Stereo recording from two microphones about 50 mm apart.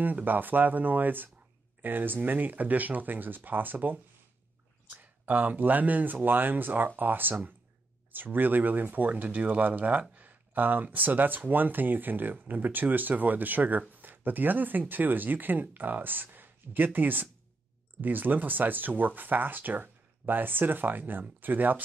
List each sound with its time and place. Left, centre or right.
0.0 s speech: right